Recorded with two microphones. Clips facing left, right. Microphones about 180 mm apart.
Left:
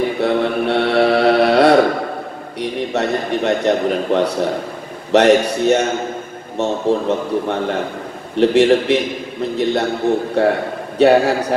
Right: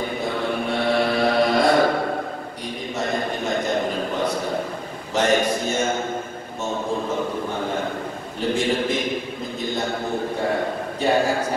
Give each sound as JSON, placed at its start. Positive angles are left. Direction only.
{"t": 0.0, "sound": "mantra", "side_deg": 70}
{"t": 2.6, "sound": "a sound", "side_deg": 70}
{"t": 5.1, "sound": "a man's voice", "side_deg": 70}